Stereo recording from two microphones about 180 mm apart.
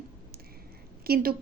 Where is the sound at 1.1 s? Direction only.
55° right (ahead or behind).